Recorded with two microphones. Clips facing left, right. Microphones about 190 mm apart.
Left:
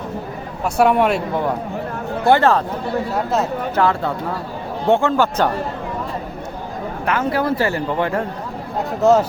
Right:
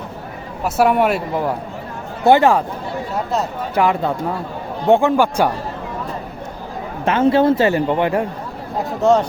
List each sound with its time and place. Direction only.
0.6 s speech: centre (ahead or behind)
2.2 s speech: 15° right (ahead or behind)
3.8 s speech: 15° right (ahead or behind)
7.0 s speech: 25° right (ahead or behind)
8.8 s speech: centre (ahead or behind)